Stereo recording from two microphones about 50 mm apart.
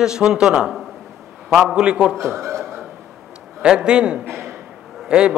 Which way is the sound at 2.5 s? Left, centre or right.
Centre.